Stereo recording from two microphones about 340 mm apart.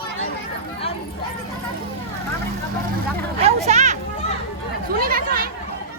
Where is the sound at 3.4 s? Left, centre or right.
Centre.